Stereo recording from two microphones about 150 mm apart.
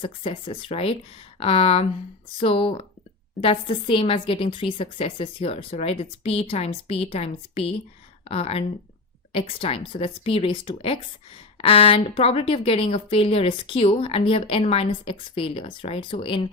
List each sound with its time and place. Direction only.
0.0 s a woman's voice: 35° left (ahead or behind)